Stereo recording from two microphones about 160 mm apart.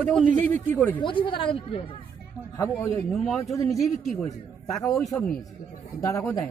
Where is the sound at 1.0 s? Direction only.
30° left (ahead or behind).